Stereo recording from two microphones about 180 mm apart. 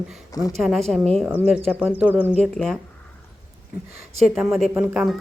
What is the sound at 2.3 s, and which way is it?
Speech, 5° left (ahead or behind).